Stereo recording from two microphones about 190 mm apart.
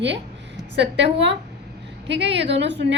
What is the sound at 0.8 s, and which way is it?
A woman's voice, 65° right (ahead or behind).